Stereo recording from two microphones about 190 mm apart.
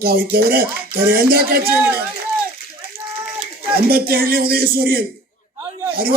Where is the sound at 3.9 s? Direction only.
50° right (ahead or behind).